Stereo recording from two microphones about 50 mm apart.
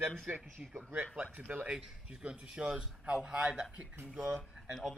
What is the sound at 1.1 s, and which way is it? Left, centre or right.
Speech, right.